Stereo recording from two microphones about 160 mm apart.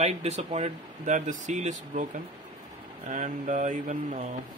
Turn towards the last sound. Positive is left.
turn(degrees=-50)  # may be behind; listen again after turning